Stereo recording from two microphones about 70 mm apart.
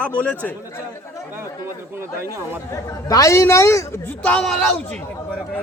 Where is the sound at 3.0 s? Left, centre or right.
Left.